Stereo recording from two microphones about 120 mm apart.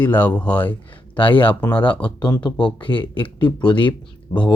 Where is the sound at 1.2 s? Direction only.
45° left (ahead or behind).